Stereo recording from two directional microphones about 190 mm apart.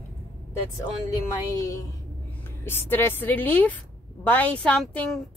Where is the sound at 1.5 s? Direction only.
15° left (ahead or behind).